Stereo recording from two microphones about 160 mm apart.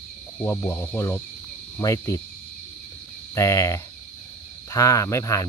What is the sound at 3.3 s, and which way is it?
Speech, 20° left (ahead or behind).